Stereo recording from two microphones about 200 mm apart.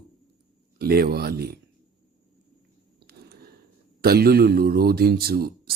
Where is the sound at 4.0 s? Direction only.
50° right (ahead or behind).